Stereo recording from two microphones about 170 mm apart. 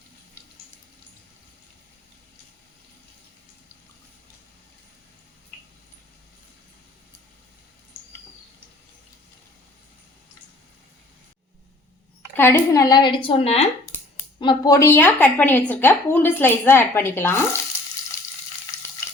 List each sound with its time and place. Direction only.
12.4 s a woman's voice: 15° left (ahead or behind); by 13.7 s 35° left (ahead or behind)
14.3 s speech: 25° left (ahead or behind)